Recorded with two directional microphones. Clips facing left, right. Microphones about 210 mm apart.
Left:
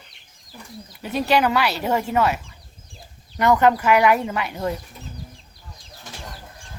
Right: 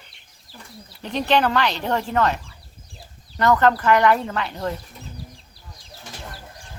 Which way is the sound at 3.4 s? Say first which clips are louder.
Left 1 dB; 10° left (ahead or behind).